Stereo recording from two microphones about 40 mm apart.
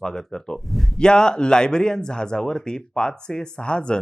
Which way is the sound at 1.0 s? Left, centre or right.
Centre.